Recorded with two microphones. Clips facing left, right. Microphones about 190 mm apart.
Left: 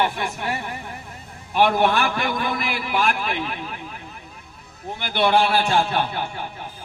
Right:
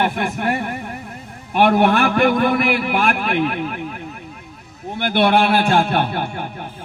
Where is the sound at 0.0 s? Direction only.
55° right (ahead or behind).